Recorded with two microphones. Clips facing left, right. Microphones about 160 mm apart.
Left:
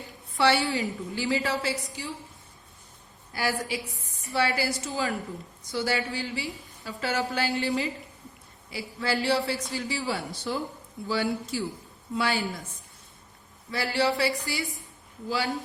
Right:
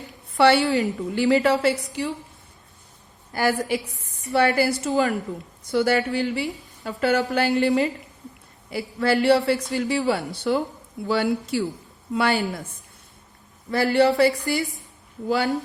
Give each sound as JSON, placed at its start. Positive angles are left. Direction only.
{"t": 0.3, "sound": "a woman's voice", "side_deg": -60}
{"t": 3.3, "sound": "a woman's voice", "side_deg": -55}
{"t": 13.7, "sound": "a woman's voice", "side_deg": -55}